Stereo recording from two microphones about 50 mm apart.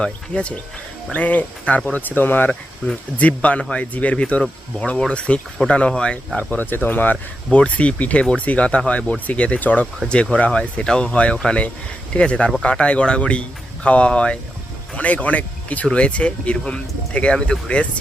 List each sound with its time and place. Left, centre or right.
0.0 s speech: left
6.7 s speech: left
7.5 s speech: left